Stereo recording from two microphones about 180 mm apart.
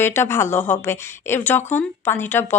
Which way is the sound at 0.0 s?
15° left (ahead or behind).